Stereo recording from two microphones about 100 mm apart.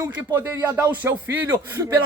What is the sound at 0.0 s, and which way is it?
A man's voice, 30° right (ahead or behind).